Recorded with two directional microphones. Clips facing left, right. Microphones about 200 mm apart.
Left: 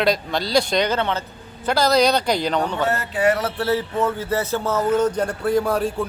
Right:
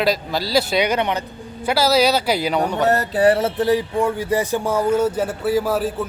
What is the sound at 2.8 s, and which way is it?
Speech, 40° right (ahead or behind).